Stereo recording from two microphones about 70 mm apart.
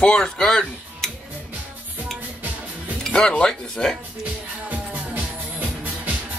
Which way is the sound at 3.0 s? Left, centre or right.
Centre.